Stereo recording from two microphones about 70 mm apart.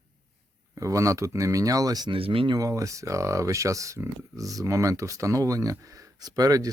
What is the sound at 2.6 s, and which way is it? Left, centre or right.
Speech, right.